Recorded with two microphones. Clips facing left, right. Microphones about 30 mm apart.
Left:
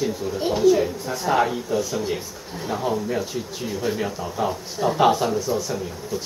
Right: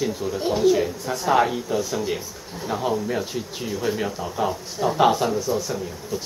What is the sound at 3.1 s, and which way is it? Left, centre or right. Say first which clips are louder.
Speech: even; centre.